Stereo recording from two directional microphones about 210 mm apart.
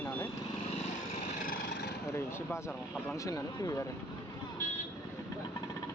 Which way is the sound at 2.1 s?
10° left (ahead or behind).